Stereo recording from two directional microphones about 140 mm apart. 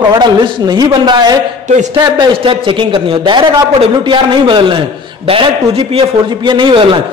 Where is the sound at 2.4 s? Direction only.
40° right (ahead or behind).